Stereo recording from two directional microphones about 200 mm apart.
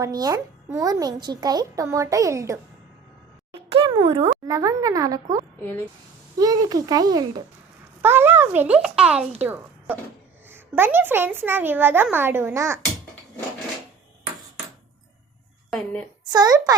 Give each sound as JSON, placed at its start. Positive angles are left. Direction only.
{"t": 0.0, "sound": "a child's voice", "side_deg": -20}
{"t": 3.5, "sound": "speech", "side_deg": -30}
{"t": 6.4, "sound": "a child's voice", "side_deg": -20}
{"t": 15.7, "sound": "a woman's voice", "side_deg": 5}
{"t": 16.2, "sound": "a child's voice", "side_deg": -20}